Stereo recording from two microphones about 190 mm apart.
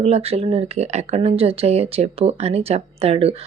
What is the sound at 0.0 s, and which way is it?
Speech, 30° right (ahead or behind).